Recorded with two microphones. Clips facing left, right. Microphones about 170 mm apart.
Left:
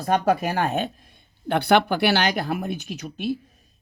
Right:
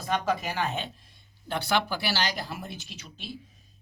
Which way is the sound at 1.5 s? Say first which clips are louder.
Left 9 dB; 60° left (ahead or behind).